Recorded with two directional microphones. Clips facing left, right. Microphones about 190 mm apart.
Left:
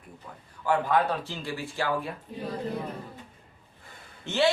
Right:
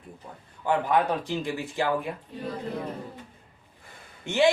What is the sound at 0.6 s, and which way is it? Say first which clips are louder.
Speech: right 1 dB; 20° right (ahead or behind).